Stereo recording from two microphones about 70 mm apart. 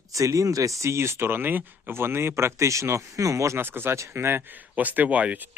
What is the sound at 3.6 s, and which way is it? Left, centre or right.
Speech, right.